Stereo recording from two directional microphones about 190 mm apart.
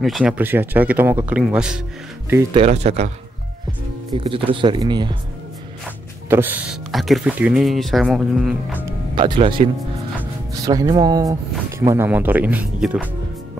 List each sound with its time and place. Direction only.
0.0 s speech: centre (ahead or behind)
2.5 s speech: 35° right (ahead or behind)
4.1 s speech: 30° right (ahead or behind)
6.2 s speech: 10° right (ahead or behind)
8.8 s speech: 25° right (ahead or behind); by 13.1 s 5° right (ahead or behind)